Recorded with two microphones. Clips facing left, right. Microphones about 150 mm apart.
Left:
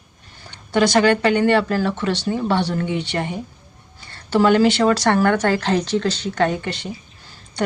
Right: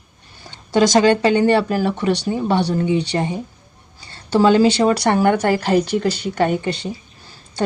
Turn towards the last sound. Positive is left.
turn(degrees=-10)  # may be behind; listen again after turning